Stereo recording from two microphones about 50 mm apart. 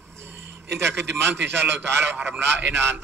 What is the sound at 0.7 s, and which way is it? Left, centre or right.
Speech, right.